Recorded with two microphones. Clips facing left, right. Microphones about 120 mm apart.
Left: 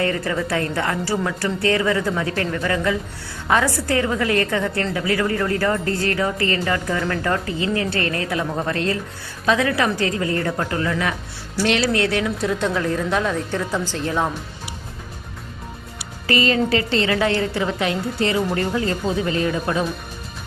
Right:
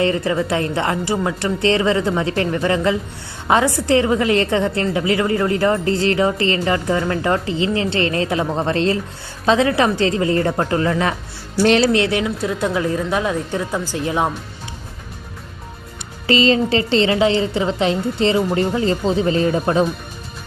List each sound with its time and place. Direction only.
0.0 s a woman's voice: 20° right (ahead or behind)
11.8 s a woman's voice: 20° right (ahead or behind)
12.2 s speech: 5° right (ahead or behind)
16.2 s a woman's voice: 25° right (ahead or behind)